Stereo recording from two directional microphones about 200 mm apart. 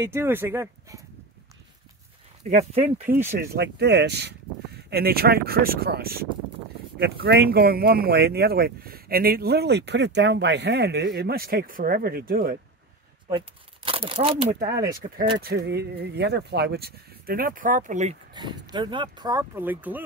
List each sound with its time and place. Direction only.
0.0 s speech: 10° right (ahead or behind)
2.5 s speech: 30° right (ahead or behind)
3.3 s speech: 55° right (ahead or behind)
13.8 s speech: 30° right (ahead or behind)
15.3 s speech: 55° right (ahead or behind); by 18.1 s 35° right (ahead or behind)
18.3 s speech: 20° right (ahead or behind)